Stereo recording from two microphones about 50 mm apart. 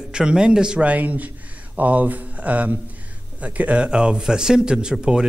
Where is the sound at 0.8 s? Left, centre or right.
Right.